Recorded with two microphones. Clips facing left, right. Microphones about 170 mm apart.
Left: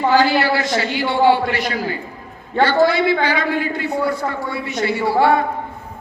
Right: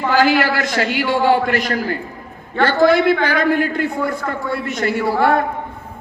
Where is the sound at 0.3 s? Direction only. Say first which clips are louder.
Right 1 dB; 50° right (ahead or behind).